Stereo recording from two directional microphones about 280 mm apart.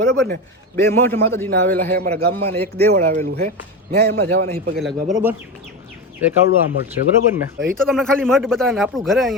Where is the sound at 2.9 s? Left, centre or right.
Right.